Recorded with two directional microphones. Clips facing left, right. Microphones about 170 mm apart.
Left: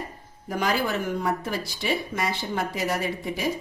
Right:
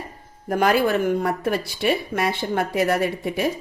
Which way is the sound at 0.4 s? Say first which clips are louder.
Right 7 dB; 55° right (ahead or behind).